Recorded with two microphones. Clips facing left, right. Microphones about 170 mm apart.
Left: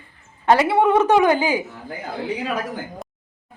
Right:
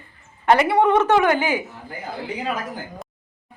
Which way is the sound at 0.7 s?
5° left (ahead or behind).